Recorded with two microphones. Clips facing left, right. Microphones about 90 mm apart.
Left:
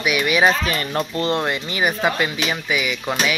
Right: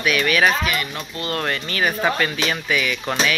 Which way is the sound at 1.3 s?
15° left (ahead or behind).